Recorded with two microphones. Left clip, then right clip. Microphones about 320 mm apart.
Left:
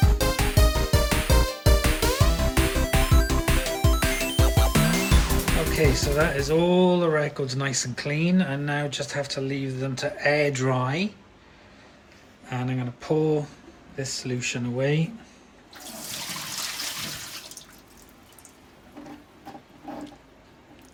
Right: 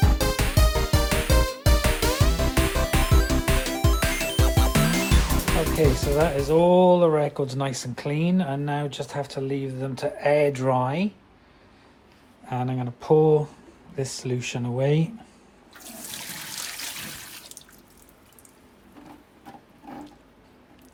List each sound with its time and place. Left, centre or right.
0.0 s music: centre
6.5 s speech: centre
12.5 s speech: centre